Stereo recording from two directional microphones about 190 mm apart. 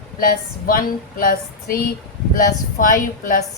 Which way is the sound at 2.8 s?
45° left (ahead or behind).